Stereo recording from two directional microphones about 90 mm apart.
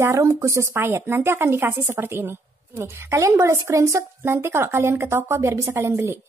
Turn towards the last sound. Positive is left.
turn(degrees=-30)  # may be behind; listen again after turning